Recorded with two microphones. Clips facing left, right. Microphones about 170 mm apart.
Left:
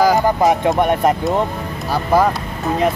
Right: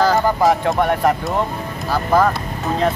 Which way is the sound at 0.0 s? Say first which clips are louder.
Left 2 dB; 15° left (ahead or behind).